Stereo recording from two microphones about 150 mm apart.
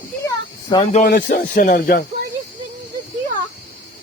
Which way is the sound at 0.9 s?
70° left (ahead or behind).